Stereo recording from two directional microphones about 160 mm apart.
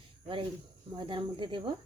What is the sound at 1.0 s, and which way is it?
Speech, 30° right (ahead or behind).